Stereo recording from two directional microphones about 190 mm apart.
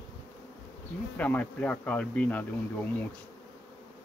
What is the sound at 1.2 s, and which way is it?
Speech, 5° left (ahead or behind).